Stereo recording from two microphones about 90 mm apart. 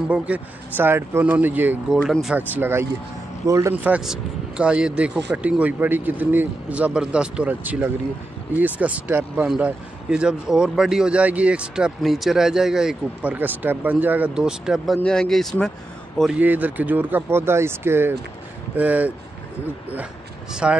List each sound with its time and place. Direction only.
0.1 s speech: 20° right (ahead or behind)
3.4 s speech: 35° right (ahead or behind)
3.7 s speech: 20° right (ahead or behind)
4.0 s speech: 10° right (ahead or behind)
13.2 s speech: 20° right (ahead or behind)
15.0 s speech: 5° left (ahead or behind)
16.3 s speech: 15° right (ahead or behind)
20.6 s speech: 10° right (ahead or behind)